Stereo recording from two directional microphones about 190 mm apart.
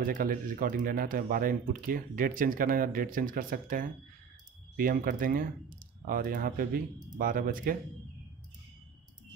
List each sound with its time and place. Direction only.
0.0 s speech: 50° right (ahead or behind)